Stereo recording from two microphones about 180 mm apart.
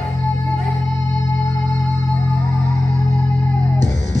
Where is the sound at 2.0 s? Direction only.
15° left (ahead or behind).